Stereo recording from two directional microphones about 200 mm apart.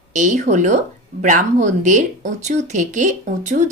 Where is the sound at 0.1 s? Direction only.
35° right (ahead or behind).